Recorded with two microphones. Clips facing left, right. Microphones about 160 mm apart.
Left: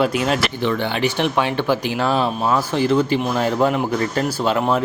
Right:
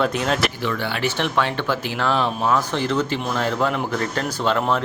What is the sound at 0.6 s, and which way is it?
Speech, 20° left (ahead or behind).